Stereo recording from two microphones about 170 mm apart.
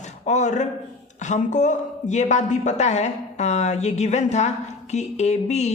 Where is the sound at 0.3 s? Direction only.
45° left (ahead or behind).